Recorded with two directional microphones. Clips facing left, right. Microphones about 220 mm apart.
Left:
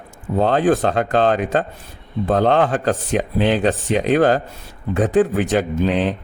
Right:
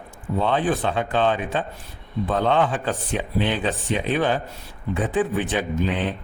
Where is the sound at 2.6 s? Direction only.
60° left (ahead or behind).